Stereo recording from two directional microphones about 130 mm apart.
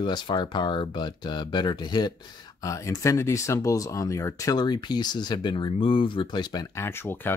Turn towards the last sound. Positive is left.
turn(degrees=15)  # may be behind; listen again after turning